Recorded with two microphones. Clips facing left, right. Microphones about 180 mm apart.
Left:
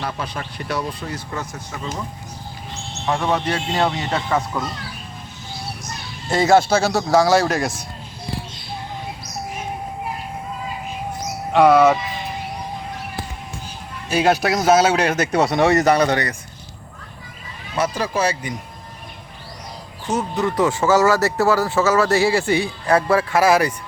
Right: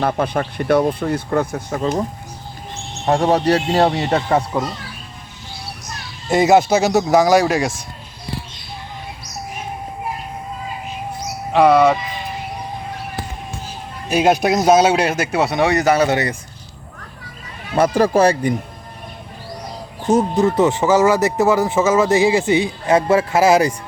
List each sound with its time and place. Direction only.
0.0 s speech: 50° right (ahead or behind)
3.1 s speech: 40° right (ahead or behind)
6.3 s speech: 20° right (ahead or behind)
7.4 s speech: 5° right (ahead or behind)
11.5 s speech: centre (ahead or behind)
14.1 s speech: 20° right (ahead or behind); by 16.0 s centre (ahead or behind)
16.0 s speech: 20° right (ahead or behind)
17.7 s speech: 55° right (ahead or behind)
20.1 s speech: 25° right (ahead or behind)